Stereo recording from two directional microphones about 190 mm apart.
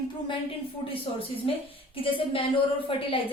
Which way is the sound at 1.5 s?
30° left (ahead or behind).